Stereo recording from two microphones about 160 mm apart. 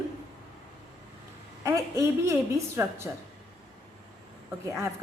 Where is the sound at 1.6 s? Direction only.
20° right (ahead or behind).